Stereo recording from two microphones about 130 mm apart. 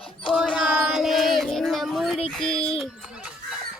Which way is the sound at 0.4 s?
Centre (ahead or behind).